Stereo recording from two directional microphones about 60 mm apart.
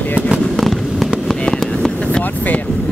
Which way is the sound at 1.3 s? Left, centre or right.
Centre.